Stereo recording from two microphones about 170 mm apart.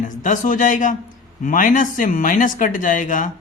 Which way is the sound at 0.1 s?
50° left (ahead or behind).